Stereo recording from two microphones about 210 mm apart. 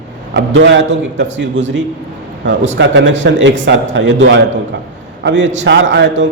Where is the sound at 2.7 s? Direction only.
60° right (ahead or behind).